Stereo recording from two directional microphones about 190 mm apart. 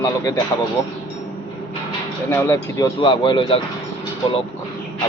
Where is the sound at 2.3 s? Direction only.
15° left (ahead or behind).